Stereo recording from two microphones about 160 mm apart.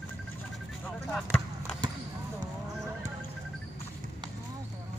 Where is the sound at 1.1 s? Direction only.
5° left (ahead or behind).